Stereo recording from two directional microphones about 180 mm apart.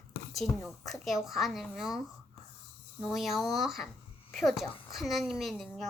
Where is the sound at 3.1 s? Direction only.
Centre (ahead or behind).